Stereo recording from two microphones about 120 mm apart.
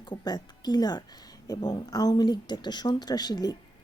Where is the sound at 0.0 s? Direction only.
40° left (ahead or behind).